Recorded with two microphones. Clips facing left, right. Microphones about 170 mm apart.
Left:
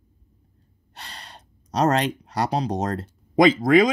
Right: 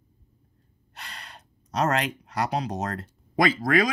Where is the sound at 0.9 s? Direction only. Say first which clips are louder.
Left 2 dB; 30° left (ahead or behind).